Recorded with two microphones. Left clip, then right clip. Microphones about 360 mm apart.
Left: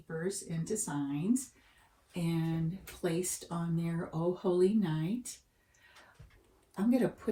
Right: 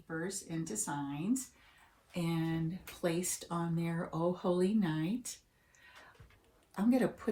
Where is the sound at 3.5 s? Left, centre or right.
Centre.